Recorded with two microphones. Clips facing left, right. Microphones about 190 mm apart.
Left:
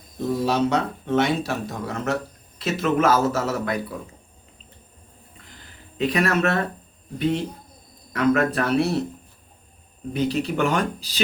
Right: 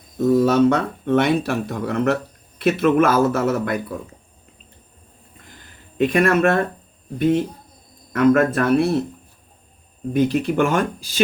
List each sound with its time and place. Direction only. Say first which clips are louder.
0.4 s speech: right 5 dB; 55° right (ahead or behind)
6.0 s speech: right 5 dB; 50° right (ahead or behind)
10.1 s speech: right 5 dB; 55° right (ahead or behind)